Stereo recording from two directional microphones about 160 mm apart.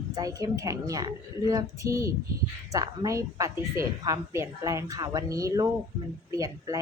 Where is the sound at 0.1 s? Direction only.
20° right (ahead or behind).